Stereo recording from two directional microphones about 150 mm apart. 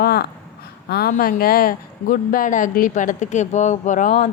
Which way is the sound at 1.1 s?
75° left (ahead or behind).